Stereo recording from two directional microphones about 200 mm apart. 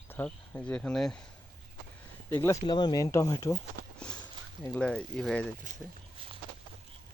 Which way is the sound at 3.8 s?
50° right (ahead or behind).